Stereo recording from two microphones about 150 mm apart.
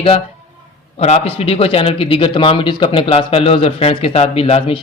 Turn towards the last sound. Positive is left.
turn(degrees=40)  # may be behind; listen again after turning